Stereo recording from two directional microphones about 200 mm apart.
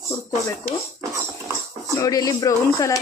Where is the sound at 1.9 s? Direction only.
15° left (ahead or behind).